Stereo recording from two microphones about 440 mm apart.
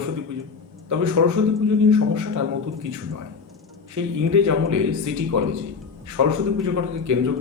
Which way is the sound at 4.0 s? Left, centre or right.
Right.